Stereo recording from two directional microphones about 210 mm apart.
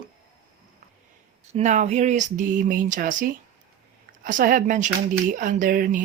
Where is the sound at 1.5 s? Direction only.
35° right (ahead or behind).